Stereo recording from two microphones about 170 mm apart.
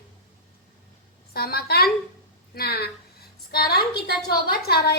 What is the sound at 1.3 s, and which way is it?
A woman's voice, 65° left (ahead or behind).